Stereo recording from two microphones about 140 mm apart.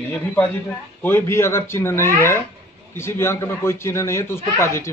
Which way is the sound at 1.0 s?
15° left (ahead or behind).